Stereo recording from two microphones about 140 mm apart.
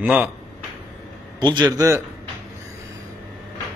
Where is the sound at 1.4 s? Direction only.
35° right (ahead or behind).